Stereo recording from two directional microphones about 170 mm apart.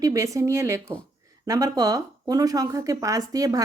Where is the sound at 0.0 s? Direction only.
20° right (ahead or behind).